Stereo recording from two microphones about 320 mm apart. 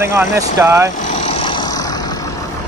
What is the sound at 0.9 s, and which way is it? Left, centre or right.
Vehicle, left.